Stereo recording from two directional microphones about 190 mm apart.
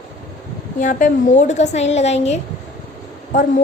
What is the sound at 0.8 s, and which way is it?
A woman's voice, 40° left (ahead or behind).